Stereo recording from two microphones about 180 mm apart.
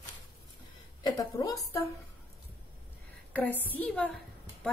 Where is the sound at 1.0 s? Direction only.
20° left (ahead or behind).